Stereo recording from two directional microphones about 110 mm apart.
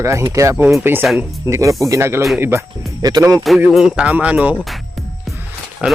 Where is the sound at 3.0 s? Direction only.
35° right (ahead or behind).